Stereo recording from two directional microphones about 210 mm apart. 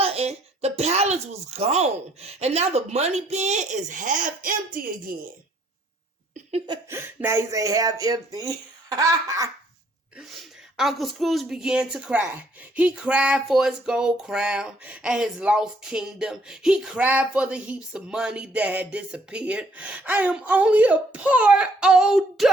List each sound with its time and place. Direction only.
0.0 s a child's voice: 30° right (ahead or behind)
6.9 s speech: 10° right (ahead or behind)
10.8 s a sound: centre (ahead or behind)